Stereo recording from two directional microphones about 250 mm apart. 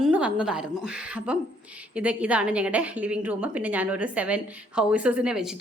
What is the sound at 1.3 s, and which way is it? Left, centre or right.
A woman's voice, centre.